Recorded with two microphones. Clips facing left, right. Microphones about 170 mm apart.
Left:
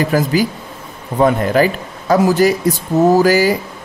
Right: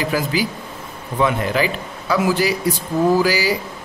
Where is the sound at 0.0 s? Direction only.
45° left (ahead or behind).